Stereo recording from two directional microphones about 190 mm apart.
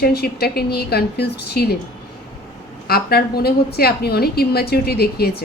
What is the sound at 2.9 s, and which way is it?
A woman's voice, 55° left (ahead or behind).